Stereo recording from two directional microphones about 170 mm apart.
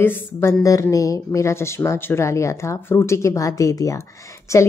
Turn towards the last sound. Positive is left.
turn(degrees=15)  # may be behind; listen again after turning